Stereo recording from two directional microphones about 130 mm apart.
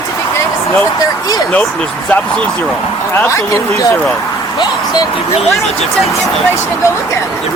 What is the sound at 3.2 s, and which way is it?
Speech, 25° left (ahead or behind).